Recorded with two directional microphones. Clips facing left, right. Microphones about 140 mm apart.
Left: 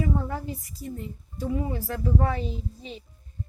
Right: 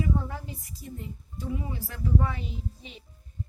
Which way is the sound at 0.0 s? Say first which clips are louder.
Left 2 dB; 50° left (ahead or behind).